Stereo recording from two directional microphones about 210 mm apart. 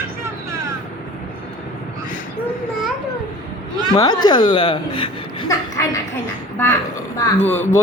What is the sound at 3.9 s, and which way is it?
Speech, 20° left (ahead or behind).